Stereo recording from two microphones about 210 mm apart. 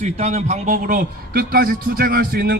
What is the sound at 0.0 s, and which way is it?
A man's voice, 30° right (ahead or behind).